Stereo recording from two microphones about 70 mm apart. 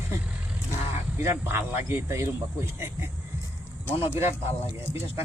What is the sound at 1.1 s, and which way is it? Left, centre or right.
Speech, right.